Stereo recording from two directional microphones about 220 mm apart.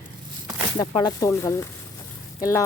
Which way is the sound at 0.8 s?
15° left (ahead or behind).